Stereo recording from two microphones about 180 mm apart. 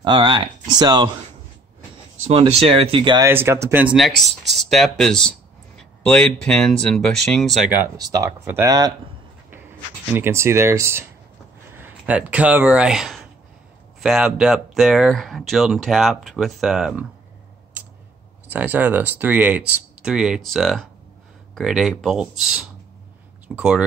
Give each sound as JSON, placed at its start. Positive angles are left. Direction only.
{"t": 0.0, "sound": "speech", "side_deg": -25}
{"t": 2.6, "sound": "speech", "side_deg": -35}
{"t": 3.3, "sound": "speech", "side_deg": -10}
{"t": 5.8, "sound": "a sound", "side_deg": 5}
{"t": 6.4, "sound": "speech", "side_deg": 5}
{"t": 8.1, "sound": "speech", "side_deg": -15}
{"t": 10.0, "sound": "speech", "side_deg": -10}
{"t": 18.5, "sound": "speech", "side_deg": -10}